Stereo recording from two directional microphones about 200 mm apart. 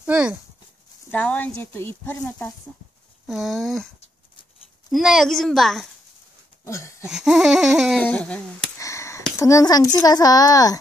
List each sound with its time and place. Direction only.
0.0 s speech: 5° right (ahead or behind)
1.1 s speech: 10° left (ahead or behind)
4.9 s speech: centre (ahead or behind)
6.6 s a sound: 15° left (ahead or behind)
7.1 s a sound: centre (ahead or behind); by 9.2 s 15° left (ahead or behind)
9.4 s a woman's voice: 15° left (ahead or behind)